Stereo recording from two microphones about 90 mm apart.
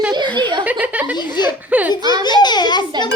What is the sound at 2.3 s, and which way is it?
Speech, 55° left (ahead or behind).